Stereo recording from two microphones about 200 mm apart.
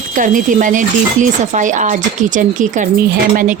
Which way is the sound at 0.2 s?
40° right (ahead or behind).